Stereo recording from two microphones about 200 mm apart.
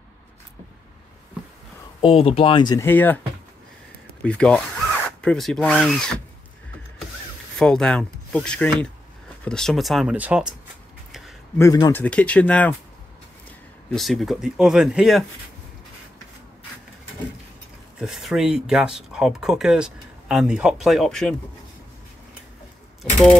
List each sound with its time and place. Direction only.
2.0 s speech: 25° left (ahead or behind); by 3.2 s 10° left (ahead or behind)
4.2 s speech: 5° left (ahead or behind)
7.5 s speech: 5° left (ahead or behind)
11.1 s a sound: centre (ahead or behind)
11.5 s speech: 15° left (ahead or behind); by 15.2 s centre (ahead or behind)
17.9 s speech: 5° right (ahead or behind)